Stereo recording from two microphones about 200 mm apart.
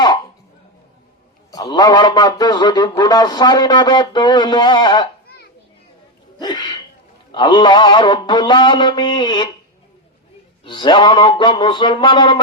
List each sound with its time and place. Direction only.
1.5 s speech: 20° left (ahead or behind)
6.4 s speech: 20° left (ahead or behind)
10.6 s speech: 25° left (ahead or behind)